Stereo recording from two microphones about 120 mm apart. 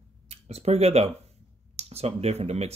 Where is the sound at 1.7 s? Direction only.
60° right (ahead or behind).